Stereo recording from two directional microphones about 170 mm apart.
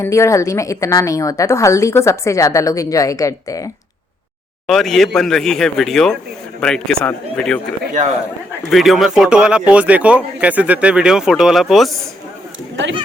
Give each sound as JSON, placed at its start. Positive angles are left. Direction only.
{"t": 0.0, "sound": "a woman's voice", "side_deg": 15}
{"t": 4.6, "sound": "speech", "side_deg": 0}
{"t": 8.7, "sound": "speech", "side_deg": 0}